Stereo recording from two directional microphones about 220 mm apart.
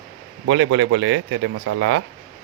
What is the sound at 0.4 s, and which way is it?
Speech, 55° right (ahead or behind).